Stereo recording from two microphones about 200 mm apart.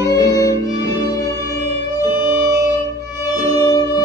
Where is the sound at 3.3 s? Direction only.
20° left (ahead or behind).